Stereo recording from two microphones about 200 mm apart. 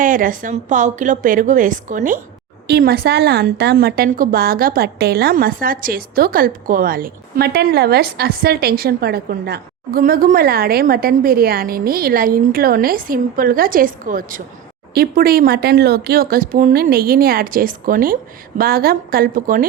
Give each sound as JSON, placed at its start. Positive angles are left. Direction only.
{"t": 0.0, "sound": "a woman's voice", "side_deg": -40}
{"t": 2.6, "sound": "a woman's voice", "side_deg": -50}